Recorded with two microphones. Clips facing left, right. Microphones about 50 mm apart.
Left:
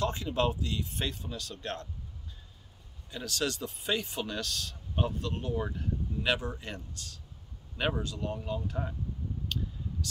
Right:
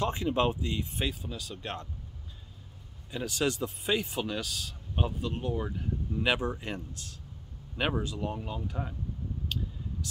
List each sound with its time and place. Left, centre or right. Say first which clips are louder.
0.0 s speech: right 2 dB; right
0.9 s speech: right 2 dB; centre
3.1 s speech: right 3 dB; centre
6.2 s speech: right 3 dB; centre
9.5 s a sound: even; centre